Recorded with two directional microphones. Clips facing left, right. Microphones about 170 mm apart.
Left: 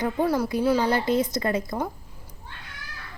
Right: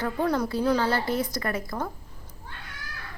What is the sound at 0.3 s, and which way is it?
A woman's voice, 10° left (ahead or behind).